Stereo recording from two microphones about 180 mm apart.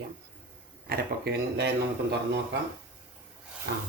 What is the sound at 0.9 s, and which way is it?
Speech, 65° right (ahead or behind).